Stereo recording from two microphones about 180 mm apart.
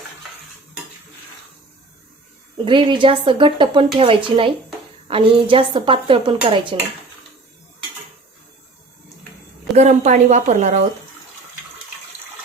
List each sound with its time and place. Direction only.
2.6 s speech: 25° right (ahead or behind)
9.7 s a woman's voice: 40° right (ahead or behind)